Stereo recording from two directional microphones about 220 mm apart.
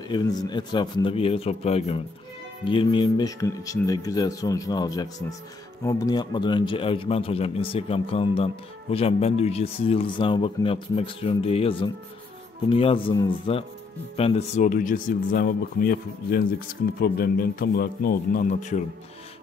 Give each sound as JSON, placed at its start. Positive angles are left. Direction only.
{"t": 0.1, "sound": "speech", "side_deg": 20}